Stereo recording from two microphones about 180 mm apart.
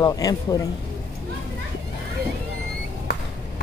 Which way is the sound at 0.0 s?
20° left (ahead or behind).